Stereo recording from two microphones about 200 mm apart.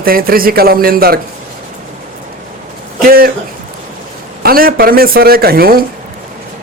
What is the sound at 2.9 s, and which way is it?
Speech, 45° right (ahead or behind).